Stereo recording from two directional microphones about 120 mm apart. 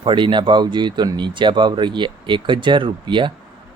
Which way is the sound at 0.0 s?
40° right (ahead or behind).